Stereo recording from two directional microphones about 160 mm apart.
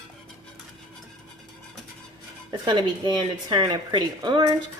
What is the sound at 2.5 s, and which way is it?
Speech, 30° right (ahead or behind).